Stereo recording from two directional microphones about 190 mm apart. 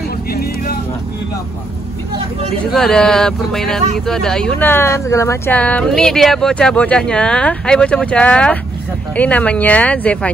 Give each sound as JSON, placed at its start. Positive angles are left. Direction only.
{"t": 0.3, "sound": "music", "side_deg": 55}
{"t": 2.6, "sound": "speech", "side_deg": 0}